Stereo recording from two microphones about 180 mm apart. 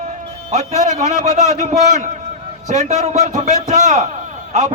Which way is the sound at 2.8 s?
40° right (ahead or behind).